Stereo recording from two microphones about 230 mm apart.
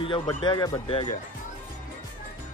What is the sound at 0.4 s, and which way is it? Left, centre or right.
Speech, left.